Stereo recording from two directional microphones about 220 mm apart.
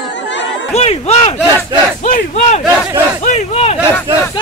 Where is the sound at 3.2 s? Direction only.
30° left (ahead or behind).